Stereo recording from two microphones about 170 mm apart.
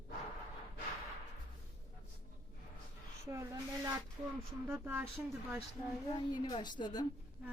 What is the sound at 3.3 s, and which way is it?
A woman's voice, 15° right (ahead or behind).